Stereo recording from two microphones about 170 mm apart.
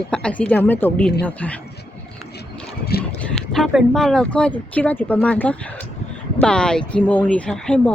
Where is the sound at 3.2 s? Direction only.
5° left (ahead or behind).